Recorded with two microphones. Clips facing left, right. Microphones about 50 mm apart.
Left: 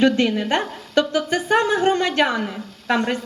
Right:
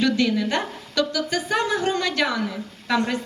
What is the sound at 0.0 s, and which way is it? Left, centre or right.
A woman's voice, left.